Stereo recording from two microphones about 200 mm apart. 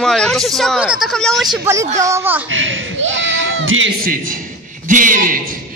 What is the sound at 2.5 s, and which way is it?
Speech, 75° right (ahead or behind).